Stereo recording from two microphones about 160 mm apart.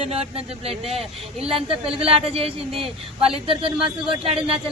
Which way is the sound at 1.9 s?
35° right (ahead or behind).